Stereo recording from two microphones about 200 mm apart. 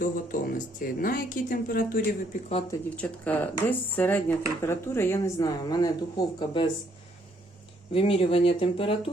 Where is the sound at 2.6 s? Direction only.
10° left (ahead or behind); by 6.7 s 25° left (ahead or behind).